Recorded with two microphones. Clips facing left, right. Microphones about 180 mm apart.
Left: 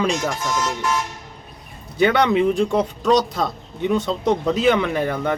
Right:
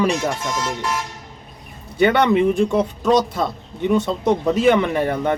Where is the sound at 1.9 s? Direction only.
60° right (ahead or behind).